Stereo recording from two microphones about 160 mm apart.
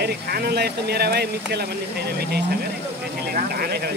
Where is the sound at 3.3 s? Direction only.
70° right (ahead or behind).